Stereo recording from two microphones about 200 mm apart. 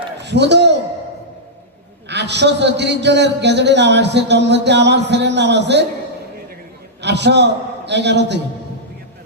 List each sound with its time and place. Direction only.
0.2 s a sound: 60° right (ahead or behind)
2.0 s a man's voice: 60° right (ahead or behind)
7.0 s a man's voice: 60° right (ahead or behind)